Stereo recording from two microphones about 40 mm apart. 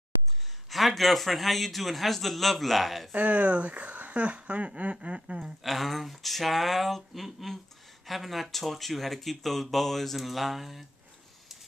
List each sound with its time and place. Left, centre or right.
0.7 s speech: centre
3.1 s speech: right
4.9 s a sound: right
5.6 s speech: centre